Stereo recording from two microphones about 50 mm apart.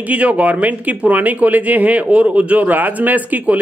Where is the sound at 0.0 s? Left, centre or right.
Right.